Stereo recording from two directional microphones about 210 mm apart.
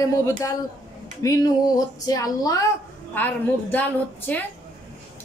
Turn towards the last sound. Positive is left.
turn(degrees=10)  # may be behind; listen again after turning